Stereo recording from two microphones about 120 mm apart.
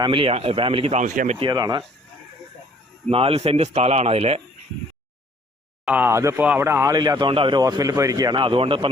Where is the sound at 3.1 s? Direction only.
50° right (ahead or behind).